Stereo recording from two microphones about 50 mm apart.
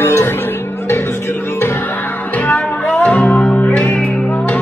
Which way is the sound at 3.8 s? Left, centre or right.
Left.